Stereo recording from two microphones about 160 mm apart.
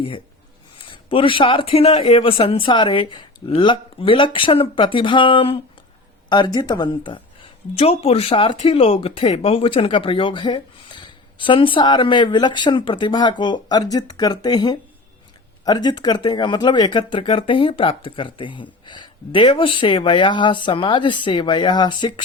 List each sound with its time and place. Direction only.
0.8 s speech: 35° left (ahead or behind)